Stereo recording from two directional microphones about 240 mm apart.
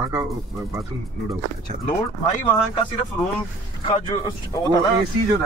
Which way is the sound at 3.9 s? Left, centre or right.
Centre.